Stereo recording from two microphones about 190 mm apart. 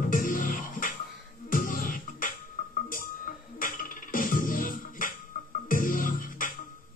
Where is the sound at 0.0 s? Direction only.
45° left (ahead or behind).